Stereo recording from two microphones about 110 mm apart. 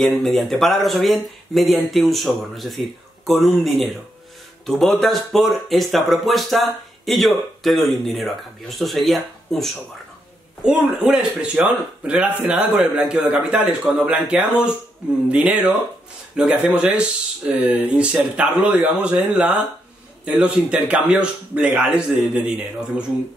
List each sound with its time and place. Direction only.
0.0 s a man's voice: centre (ahead or behind)